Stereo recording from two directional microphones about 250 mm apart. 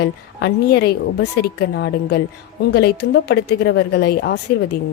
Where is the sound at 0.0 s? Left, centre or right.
Left.